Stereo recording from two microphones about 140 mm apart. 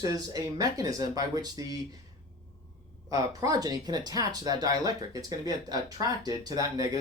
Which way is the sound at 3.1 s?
25° right (ahead or behind).